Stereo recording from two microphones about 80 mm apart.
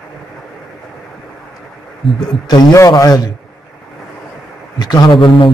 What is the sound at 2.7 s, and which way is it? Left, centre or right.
Speech, left.